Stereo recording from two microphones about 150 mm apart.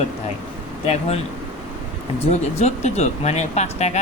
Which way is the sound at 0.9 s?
45° left (ahead or behind).